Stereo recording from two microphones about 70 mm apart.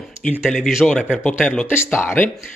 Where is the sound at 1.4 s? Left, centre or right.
Left.